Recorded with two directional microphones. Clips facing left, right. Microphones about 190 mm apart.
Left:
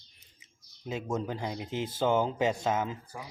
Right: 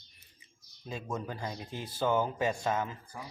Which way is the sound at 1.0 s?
15° left (ahead or behind).